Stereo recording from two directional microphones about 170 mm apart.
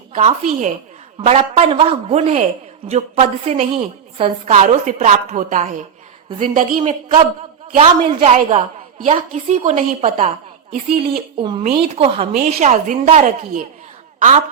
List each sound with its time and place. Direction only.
0.3 s a woman's voice: 45° right (ahead or behind)
7.7 s a woman's voice: 30° right (ahead or behind)
11.3 s a woman's voice: 30° right (ahead or behind); by 14.4 s 45° right (ahead or behind)